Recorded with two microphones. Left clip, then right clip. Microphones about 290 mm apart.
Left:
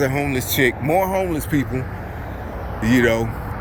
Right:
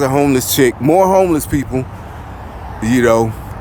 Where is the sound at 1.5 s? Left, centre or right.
Centre.